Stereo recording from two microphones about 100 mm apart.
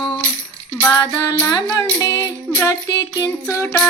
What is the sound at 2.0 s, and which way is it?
Speech, 40° left (ahead or behind).